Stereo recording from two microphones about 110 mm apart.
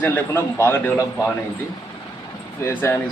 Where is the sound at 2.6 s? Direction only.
25° left (ahead or behind).